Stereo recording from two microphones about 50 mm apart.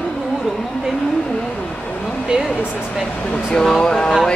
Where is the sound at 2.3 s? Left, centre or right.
Centre.